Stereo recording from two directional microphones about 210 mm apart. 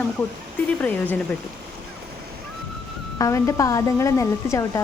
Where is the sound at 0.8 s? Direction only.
5° left (ahead or behind).